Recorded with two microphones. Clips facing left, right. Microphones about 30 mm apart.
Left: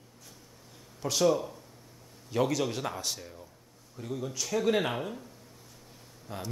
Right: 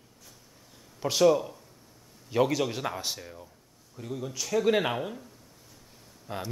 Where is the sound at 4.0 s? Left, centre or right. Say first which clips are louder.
Even; centre.